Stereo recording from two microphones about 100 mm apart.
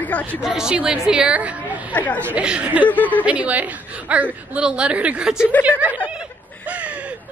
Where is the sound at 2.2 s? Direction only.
10° right (ahead or behind).